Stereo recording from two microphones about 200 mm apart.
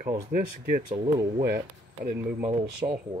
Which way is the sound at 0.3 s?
45° right (ahead or behind).